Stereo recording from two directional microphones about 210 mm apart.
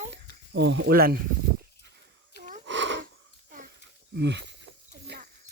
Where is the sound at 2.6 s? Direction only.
60° right (ahead or behind).